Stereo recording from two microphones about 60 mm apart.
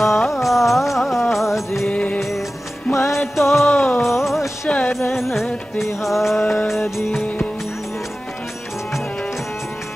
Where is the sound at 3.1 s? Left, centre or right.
Centre.